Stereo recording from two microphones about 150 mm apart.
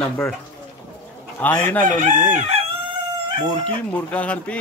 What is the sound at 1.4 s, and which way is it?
Speech, 10° left (ahead or behind).